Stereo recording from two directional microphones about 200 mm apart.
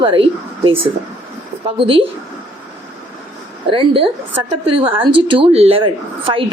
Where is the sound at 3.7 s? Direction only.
25° right (ahead or behind).